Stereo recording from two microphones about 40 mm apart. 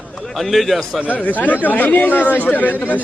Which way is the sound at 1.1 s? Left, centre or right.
Left.